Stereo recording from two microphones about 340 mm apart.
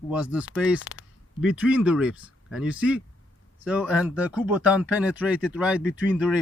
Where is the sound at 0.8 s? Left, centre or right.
Left.